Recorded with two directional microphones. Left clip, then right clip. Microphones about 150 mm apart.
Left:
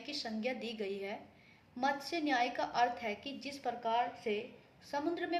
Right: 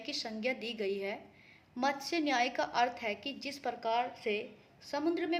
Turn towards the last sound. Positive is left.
turn(degrees=-45)  # may be behind; listen again after turning